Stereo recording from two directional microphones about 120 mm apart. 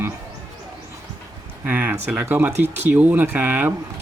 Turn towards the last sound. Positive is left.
turn(degrees=-15)  # may be behind; listen again after turning